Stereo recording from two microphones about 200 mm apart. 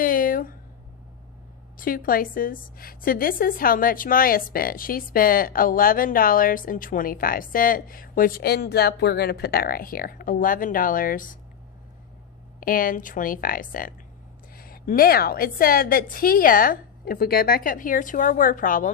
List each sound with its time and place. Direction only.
0.0 s a sound: 45° left (ahead or behind)
1.7 s a woman's voice: 45° left (ahead or behind)
12.5 s a woman's voice: 45° left (ahead or behind)